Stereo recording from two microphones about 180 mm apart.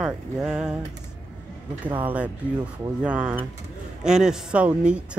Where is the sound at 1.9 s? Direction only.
10° right (ahead or behind).